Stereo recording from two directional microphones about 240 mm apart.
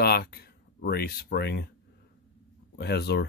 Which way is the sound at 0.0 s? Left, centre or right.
Left.